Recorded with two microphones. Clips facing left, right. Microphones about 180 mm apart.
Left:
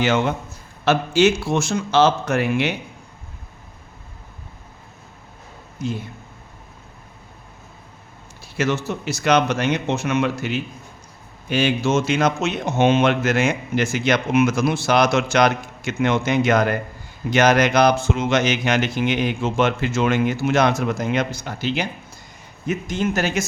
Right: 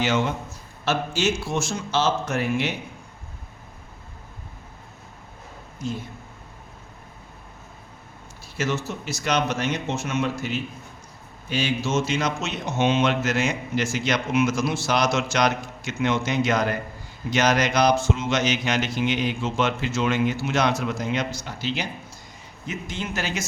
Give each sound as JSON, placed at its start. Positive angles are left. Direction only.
{"t": 0.0, "sound": "a man's voice", "side_deg": 55}
{"t": 8.5, "sound": "a man's voice", "side_deg": 65}
{"t": 11.4, "sound": "a man's voice", "side_deg": 60}